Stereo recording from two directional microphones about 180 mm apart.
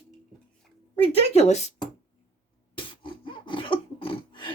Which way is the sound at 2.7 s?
25° left (ahead or behind).